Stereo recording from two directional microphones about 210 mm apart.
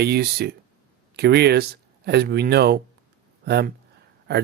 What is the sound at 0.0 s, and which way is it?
Speech, 50° right (ahead or behind).